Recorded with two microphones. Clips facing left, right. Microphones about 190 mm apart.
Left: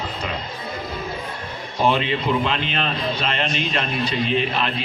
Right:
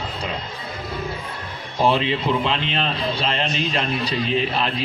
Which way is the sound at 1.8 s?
30° right (ahead or behind).